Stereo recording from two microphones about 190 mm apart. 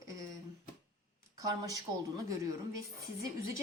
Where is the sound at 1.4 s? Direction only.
20° right (ahead or behind).